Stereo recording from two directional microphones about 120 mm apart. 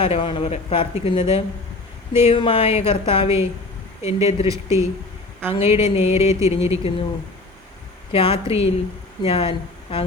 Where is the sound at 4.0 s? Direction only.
65° left (ahead or behind).